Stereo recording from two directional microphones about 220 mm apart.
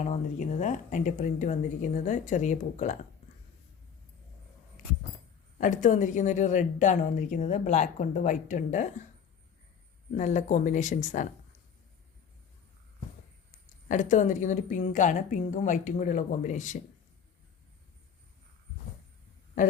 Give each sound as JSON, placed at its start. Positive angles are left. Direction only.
{"t": 0.0, "sound": "a woman's voice", "side_deg": 30}
{"t": 5.5, "sound": "a woman's voice", "side_deg": 35}
{"t": 10.1, "sound": "a woman's voice", "side_deg": 35}
{"t": 13.8, "sound": "a woman's voice", "side_deg": 35}